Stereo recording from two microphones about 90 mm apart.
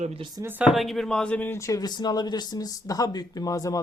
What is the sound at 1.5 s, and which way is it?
Speech, 35° left (ahead or behind).